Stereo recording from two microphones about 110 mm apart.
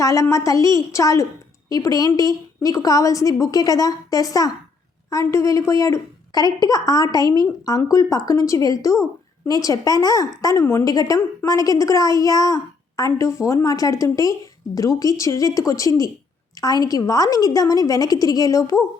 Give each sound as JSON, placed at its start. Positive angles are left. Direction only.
{"t": 0.0, "sound": "a woman's voice", "side_deg": 30}